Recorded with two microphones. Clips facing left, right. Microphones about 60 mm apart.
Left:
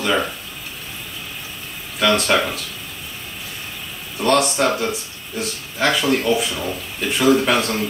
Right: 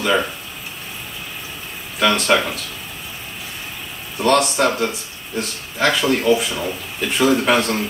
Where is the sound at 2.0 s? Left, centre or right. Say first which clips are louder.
Right 1 dB; centre.